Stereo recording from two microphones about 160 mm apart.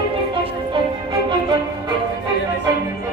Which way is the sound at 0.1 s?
30° right (ahead or behind).